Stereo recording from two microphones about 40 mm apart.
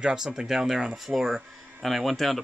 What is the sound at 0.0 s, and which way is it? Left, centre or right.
Speech, centre.